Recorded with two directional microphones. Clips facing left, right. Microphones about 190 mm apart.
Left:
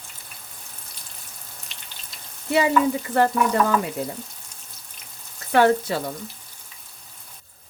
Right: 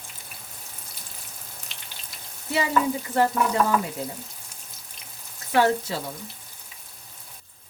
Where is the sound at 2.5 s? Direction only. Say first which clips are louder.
Left 6 dB; 60° left (ahead or behind).